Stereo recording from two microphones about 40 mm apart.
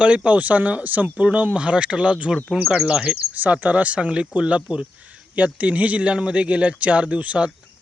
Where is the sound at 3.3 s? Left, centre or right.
Right.